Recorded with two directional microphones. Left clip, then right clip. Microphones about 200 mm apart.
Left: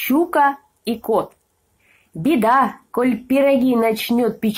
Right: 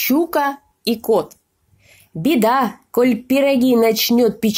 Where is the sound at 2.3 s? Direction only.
45° right (ahead or behind).